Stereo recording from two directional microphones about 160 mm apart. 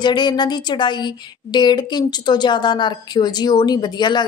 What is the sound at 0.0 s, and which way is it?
Speech, 30° left (ahead or behind).